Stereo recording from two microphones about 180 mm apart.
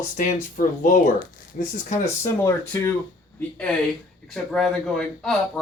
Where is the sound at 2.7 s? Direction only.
15° left (ahead or behind).